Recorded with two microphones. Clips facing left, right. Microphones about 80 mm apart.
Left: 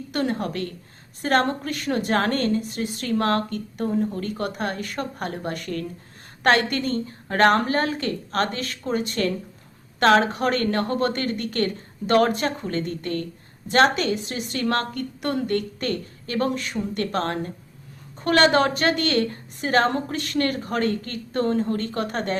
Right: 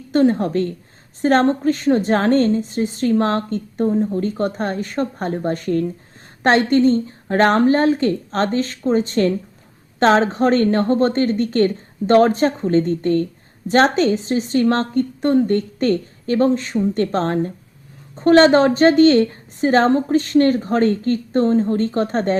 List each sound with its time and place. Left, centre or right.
0.1 s a woman's voice: right
6.7 s a woman's voice: right